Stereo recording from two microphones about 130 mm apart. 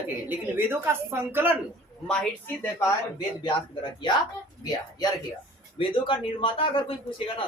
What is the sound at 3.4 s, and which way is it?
Speech, 40° left (ahead or behind).